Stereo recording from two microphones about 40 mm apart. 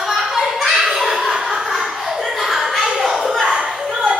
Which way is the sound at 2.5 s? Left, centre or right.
Centre.